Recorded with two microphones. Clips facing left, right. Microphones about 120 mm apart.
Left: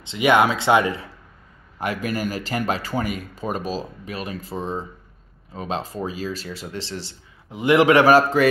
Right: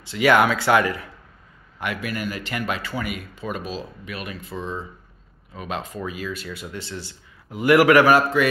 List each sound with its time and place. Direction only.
0.0 s speech: 20° left (ahead or behind)
1.8 s speech: 35° left (ahead or behind)